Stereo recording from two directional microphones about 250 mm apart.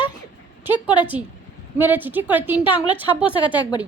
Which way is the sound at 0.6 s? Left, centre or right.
Centre.